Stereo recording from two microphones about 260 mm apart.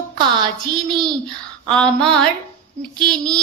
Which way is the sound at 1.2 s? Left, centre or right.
Centre.